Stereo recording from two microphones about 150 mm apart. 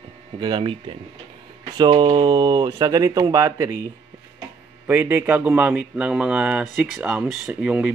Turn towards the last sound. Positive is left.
turn(degrees=-5)  # may be behind; listen again after turning